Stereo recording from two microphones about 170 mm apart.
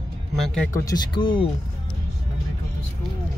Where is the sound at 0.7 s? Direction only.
20° left (ahead or behind).